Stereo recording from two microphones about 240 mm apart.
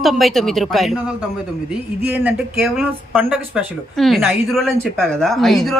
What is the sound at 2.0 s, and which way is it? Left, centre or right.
A woman's voice, centre.